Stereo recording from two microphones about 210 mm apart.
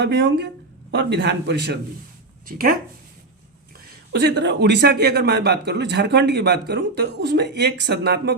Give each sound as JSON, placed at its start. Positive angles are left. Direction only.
{"t": 0.0, "sound": "a man's voice", "side_deg": -55}
{"t": 3.8, "sound": "a man's voice", "side_deg": -50}